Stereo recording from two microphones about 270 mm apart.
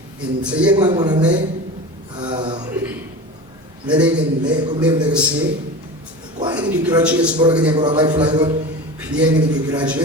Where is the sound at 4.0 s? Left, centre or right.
Right.